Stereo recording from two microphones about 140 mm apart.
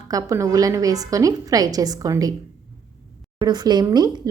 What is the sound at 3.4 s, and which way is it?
Speech, 30° right (ahead or behind).